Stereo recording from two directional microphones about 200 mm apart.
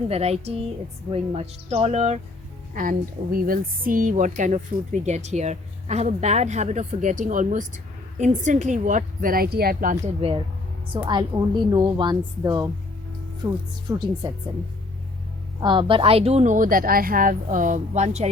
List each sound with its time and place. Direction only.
0.1 s speech: 30° right (ahead or behind); by 9.9 s 50° right (ahead or behind)
9.9 s a woman's voice: 30° right (ahead or behind)
15.6 s speech: 25° right (ahead or behind)